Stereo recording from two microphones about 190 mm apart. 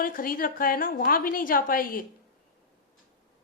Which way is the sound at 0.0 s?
50° left (ahead or behind).